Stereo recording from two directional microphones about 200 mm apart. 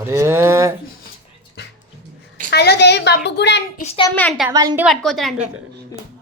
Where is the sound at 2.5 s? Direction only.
55° left (ahead or behind).